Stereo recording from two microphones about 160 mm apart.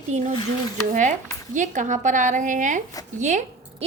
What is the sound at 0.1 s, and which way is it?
Speech, 50° right (ahead or behind).